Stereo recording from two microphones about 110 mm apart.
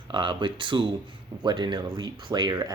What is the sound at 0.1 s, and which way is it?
Speech, 45° right (ahead or behind).